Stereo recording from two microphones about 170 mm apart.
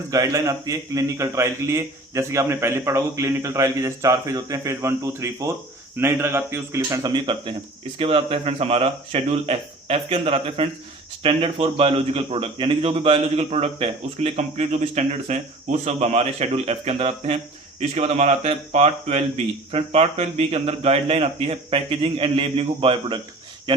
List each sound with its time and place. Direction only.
0.1 s a man's voice: 20° right (ahead or behind)